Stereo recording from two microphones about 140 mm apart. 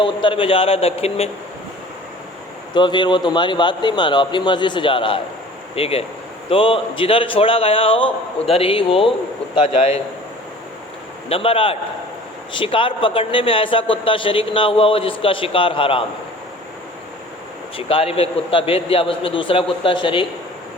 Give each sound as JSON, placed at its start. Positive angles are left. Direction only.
{"t": 0.0, "sound": "a man's voice", "side_deg": 35}
{"t": 2.7, "sound": "a man's voice", "side_deg": 35}
{"t": 11.3, "sound": "a man's voice", "side_deg": 40}
{"t": 17.7, "sound": "a man's voice", "side_deg": 40}